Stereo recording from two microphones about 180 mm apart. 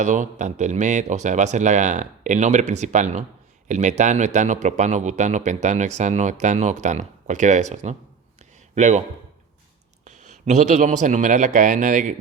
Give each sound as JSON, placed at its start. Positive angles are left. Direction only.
{"t": 0.0, "sound": "a man's voice", "side_deg": -40}
{"t": 10.0, "sound": "speech", "side_deg": -40}